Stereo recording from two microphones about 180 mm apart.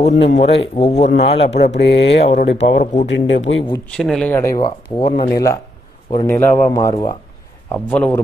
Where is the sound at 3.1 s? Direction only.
90° left.